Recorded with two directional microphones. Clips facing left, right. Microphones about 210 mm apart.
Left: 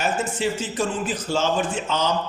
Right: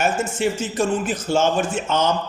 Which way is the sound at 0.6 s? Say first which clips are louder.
Right 4 dB; 50° right (ahead or behind).